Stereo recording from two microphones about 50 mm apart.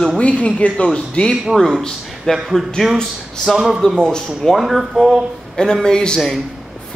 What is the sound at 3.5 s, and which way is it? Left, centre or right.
A man's voice, centre.